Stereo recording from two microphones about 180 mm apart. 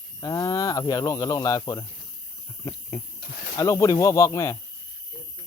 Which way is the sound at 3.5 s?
20° left (ahead or behind).